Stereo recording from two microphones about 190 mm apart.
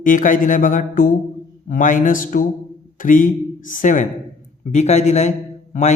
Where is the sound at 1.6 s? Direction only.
45° left (ahead or behind).